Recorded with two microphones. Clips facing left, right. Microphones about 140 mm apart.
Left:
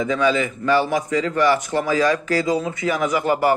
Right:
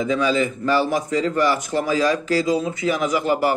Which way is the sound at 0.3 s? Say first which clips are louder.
Left 1 dB; 40° right (ahead or behind).